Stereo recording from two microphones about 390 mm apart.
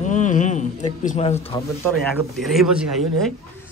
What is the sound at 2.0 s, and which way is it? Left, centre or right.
A man's voice, centre.